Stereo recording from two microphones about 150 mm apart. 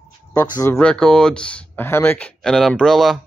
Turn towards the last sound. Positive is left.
turn(degrees=0)  # may be behind; listen again after turning